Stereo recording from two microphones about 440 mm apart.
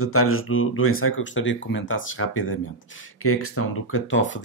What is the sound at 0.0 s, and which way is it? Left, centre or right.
Speech, left.